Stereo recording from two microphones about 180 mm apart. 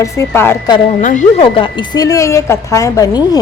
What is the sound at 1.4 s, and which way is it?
Speech, 30° left (ahead or behind).